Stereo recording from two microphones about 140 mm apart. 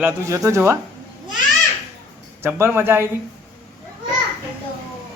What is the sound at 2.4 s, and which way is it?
Speech, 15° right (ahead or behind).